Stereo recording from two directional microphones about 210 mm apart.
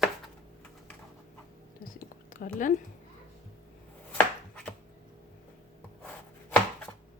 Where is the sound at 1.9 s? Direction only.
40° left (ahead or behind).